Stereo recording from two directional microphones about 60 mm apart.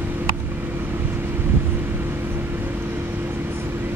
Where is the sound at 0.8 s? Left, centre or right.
Right.